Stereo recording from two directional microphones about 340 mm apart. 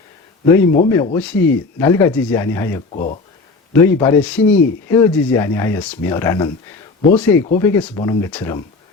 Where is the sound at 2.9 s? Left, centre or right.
Left.